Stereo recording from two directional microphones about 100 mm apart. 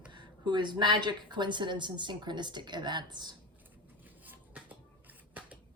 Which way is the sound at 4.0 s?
15° right (ahead or behind).